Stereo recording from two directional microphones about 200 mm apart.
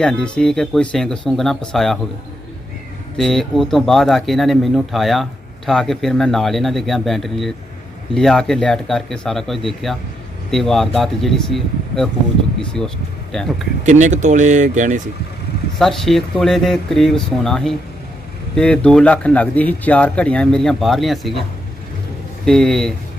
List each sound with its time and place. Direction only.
0.0 s speech: 5° left (ahead or behind)
3.2 s speech: centre (ahead or behind)
13.3 s speech: centre (ahead or behind)
13.8 s speech: 35° right (ahead or behind)
15.8 s speech: centre (ahead or behind)
22.4 s speech: centre (ahead or behind)